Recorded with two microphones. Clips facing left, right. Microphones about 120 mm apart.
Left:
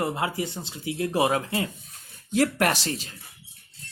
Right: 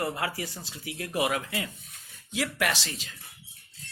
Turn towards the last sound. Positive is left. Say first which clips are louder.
# left 5 dB
turn(degrees=40)  # may be behind; listen again after turning